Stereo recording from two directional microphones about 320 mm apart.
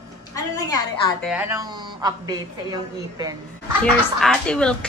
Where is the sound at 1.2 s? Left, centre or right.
Centre.